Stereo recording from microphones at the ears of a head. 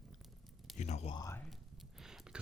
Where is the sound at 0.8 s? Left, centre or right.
Left.